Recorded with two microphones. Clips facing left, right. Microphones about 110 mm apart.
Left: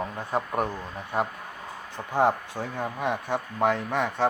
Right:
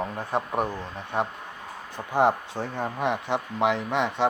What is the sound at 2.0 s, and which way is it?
Speech, 15° right (ahead or behind).